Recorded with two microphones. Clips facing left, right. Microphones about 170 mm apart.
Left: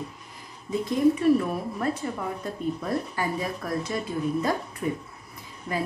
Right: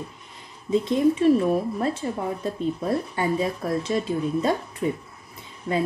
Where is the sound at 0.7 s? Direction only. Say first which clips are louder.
Right 2 dB; 25° right (ahead or behind).